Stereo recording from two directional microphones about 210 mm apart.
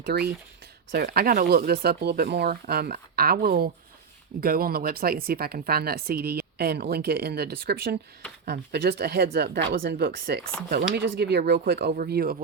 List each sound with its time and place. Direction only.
0.0 s speech: 50° right (ahead or behind)